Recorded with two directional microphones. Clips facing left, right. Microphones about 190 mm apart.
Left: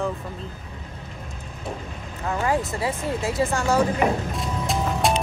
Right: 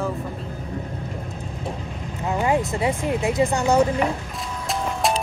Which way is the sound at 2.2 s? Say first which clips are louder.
Right 2 dB; 15° right (ahead or behind).